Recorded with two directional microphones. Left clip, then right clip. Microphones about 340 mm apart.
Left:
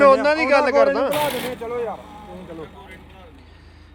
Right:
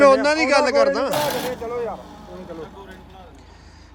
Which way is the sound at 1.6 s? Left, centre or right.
Left.